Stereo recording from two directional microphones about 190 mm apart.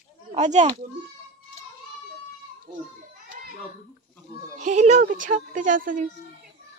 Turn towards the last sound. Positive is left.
turn(degrees=-45)  # may be behind; listen again after turning